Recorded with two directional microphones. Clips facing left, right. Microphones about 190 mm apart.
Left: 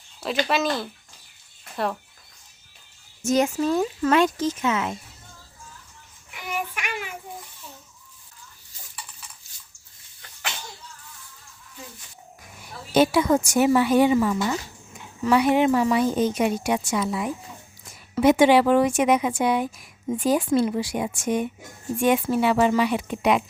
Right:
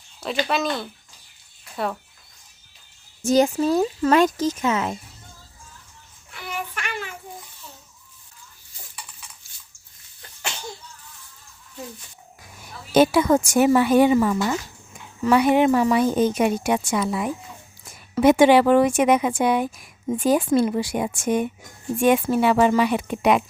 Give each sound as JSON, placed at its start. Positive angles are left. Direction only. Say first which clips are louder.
{"t": 0.4, "sound": "speech", "louder": "left 1 dB", "side_deg": 0}
{"t": 3.2, "sound": "speech", "louder": "right 3 dB", "side_deg": -35}
{"t": 6.3, "sound": "child singing", "louder": "left 1 dB", "side_deg": 15}
{"t": 12.9, "sound": "a woman's voice", "louder": "right 2 dB", "side_deg": -50}